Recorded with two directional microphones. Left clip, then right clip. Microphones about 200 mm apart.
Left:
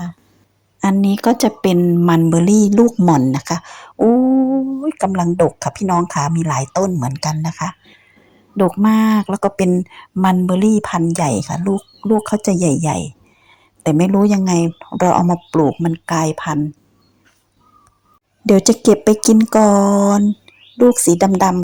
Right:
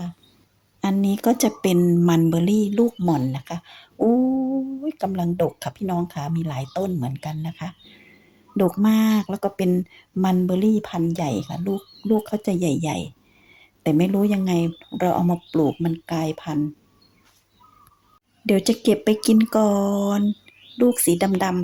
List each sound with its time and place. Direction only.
0.9 s speech: 20° left (ahead or behind)
2.4 s speech: 30° left (ahead or behind)
8.5 s speech: 15° left (ahead or behind)
18.4 s speech: 30° left (ahead or behind)